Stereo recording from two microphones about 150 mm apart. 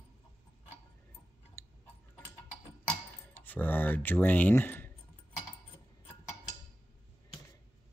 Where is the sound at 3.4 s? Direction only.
15° left (ahead or behind).